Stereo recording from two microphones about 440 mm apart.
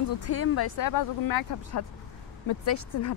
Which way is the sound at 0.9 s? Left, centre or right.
Left.